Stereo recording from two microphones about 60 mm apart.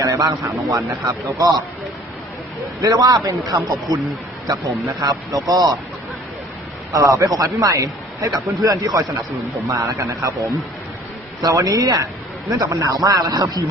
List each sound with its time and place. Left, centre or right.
0.0 s a man's voice: right
2.8 s a man's voice: right
4.4 s a man's voice: right
6.9 s a man's voice: right
11.4 s a man's voice: right
12.5 s a man's voice: right